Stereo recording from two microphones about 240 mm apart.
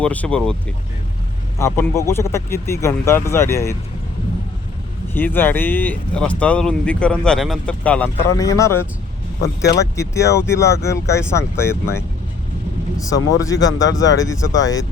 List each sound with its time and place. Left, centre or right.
0.0 s speech: centre
1.5 s speech: centre
5.1 s speech: centre
9.6 s speech: left
9.9 s speech: centre